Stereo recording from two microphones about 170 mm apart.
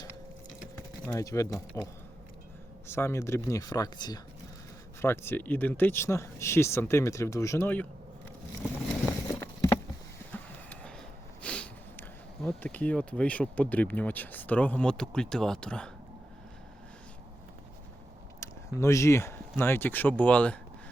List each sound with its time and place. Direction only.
1.0 s speech: 20° left (ahead or behind)
4.9 s speech: 15° left (ahead or behind)
9.4 s a sound: 20° left (ahead or behind)
10.3 s vehicle: 10° left (ahead or behind)
11.4 s speech: 5° left (ahead or behind)
18.3 s speech: 15° left (ahead or behind)